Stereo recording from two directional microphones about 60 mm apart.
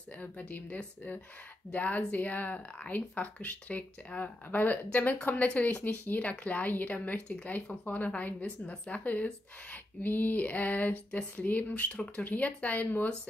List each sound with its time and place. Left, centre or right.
0.2 s speech: left